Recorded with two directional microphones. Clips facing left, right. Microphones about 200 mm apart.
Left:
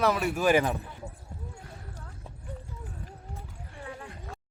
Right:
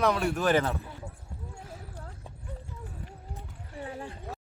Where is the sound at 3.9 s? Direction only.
30° right (ahead or behind).